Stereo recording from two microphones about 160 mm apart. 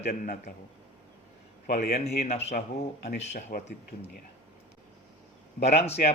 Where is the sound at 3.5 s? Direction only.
90° left.